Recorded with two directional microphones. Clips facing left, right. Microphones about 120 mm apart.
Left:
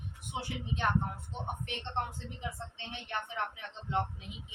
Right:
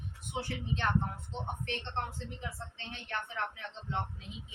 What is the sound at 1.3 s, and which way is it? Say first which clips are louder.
A woman's voice: right 1 dB; 15° left (ahead or behind).